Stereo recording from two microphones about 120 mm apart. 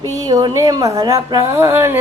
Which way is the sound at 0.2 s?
35° right (ahead or behind).